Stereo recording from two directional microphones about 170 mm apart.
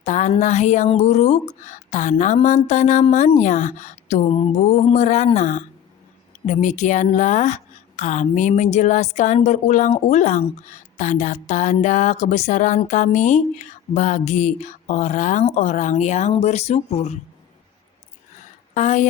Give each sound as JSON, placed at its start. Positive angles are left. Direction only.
{"t": 0.0, "sound": "a woman's voice", "side_deg": 45}
{"t": 18.7, "sound": "speech", "side_deg": 45}